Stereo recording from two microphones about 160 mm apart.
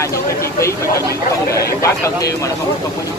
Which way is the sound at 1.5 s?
20° left (ahead or behind).